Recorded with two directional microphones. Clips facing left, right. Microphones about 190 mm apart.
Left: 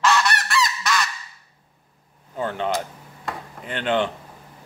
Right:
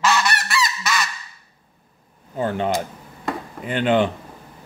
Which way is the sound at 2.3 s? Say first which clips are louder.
Right 3 dB; 10° right (ahead or behind).